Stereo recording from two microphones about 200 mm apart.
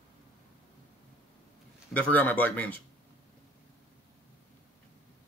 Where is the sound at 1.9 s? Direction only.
10° left (ahead or behind).